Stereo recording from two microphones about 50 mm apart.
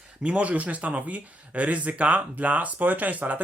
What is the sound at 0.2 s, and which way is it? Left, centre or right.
Speech, right.